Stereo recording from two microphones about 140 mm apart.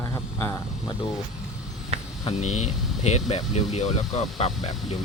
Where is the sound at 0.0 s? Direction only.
20° left (ahead or behind).